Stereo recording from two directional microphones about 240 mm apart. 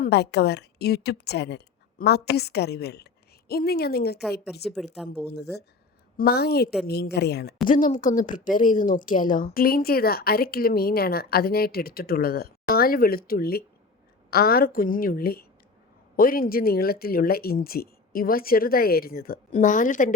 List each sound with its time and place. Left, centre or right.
0.0 s a woman's voice: left
4.6 s speech: centre
5.3 s a woman's voice: left